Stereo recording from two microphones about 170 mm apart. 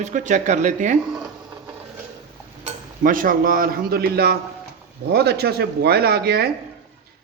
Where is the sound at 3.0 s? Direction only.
55° right (ahead or behind).